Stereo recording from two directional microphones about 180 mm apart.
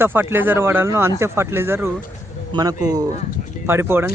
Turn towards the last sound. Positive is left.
turn(degrees=-10)  # may be behind; listen again after turning